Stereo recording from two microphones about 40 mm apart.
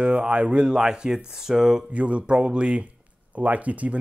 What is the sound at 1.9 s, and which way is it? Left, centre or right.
Speech, right.